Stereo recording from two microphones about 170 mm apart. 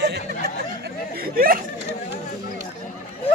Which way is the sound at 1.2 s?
60° right (ahead or behind).